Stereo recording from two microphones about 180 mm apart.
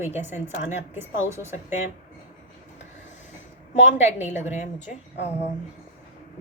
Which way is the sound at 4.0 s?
10° right (ahead or behind).